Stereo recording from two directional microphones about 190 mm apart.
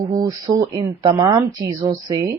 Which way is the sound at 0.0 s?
20° right (ahead or behind).